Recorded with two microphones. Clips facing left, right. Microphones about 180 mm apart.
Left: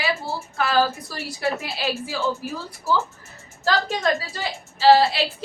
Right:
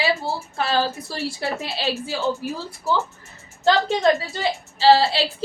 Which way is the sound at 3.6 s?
25° right (ahead or behind).